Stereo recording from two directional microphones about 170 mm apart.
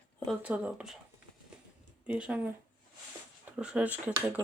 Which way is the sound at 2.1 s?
5° right (ahead or behind).